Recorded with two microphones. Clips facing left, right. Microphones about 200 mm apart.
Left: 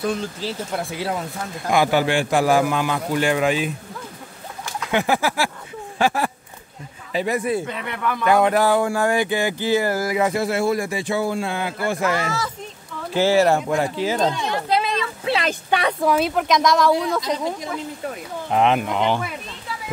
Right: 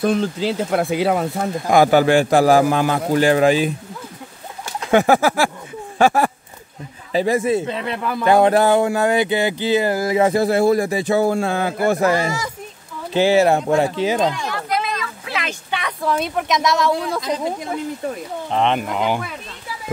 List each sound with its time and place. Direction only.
0.6 s speech: 65° right (ahead or behind)
1.7 s a man's voice: 45° right (ahead or behind)
4.9 s a sound: 45° right (ahead or behind)
7.1 s a man's voice: 30° right (ahead or behind)
13.1 s speech: 20° right (ahead or behind)
14.3 s a sound: 25° left (ahead or behind)
15.4 s speech: 40° left (ahead or behind)
16.1 s speech: 5° left (ahead or behind)
18.5 s speech: 5° left (ahead or behind)